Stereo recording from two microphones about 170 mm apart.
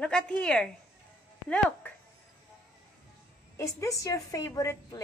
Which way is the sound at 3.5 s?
20° left (ahead or behind).